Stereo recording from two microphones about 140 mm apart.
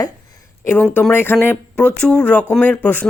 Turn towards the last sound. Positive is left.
turn(degrees=10)  # may be behind; listen again after turning